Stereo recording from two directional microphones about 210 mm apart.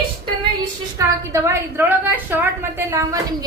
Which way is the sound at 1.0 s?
15° right (ahead or behind).